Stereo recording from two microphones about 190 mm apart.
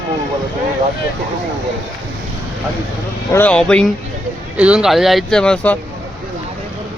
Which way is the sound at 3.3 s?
5° left (ahead or behind).